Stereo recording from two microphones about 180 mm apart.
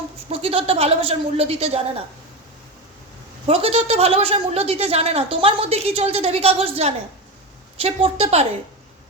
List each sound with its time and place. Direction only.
0.3 s a woman's voice: 35° right (ahead or behind)
3.4 s a woman's voice: 30° right (ahead or behind)